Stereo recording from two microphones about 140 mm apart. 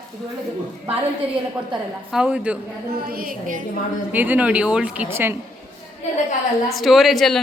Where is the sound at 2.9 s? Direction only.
90° right.